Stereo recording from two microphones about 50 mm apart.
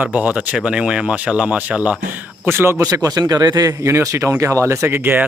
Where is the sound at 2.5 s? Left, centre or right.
Right.